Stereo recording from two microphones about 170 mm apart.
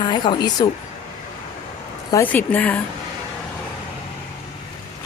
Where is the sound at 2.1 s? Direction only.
10° left (ahead or behind).